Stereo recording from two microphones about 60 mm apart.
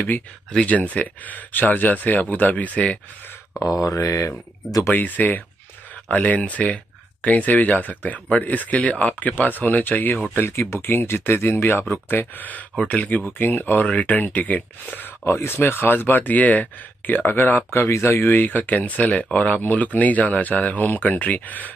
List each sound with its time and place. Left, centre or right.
0.5 s speech: centre
3.6 s speech: left
4.8 s speech: left
15.2 s speech: left
17.7 s speech: left